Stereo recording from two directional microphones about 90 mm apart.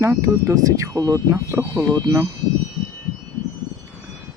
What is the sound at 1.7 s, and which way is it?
Speech, 50° right (ahead or behind).